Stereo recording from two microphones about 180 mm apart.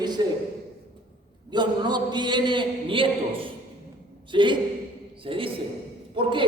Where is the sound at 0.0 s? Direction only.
25° right (ahead or behind).